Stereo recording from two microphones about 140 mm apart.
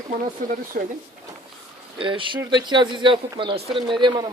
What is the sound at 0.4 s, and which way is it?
Speech, 75° right (ahead or behind).